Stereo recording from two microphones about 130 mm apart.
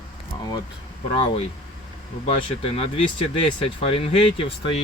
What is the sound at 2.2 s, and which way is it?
Speech, 50° left (ahead or behind).